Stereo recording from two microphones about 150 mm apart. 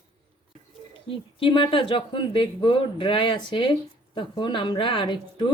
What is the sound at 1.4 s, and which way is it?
Speech, 35° left (ahead or behind).